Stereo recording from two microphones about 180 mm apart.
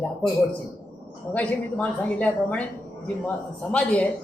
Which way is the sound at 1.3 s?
10° left (ahead or behind).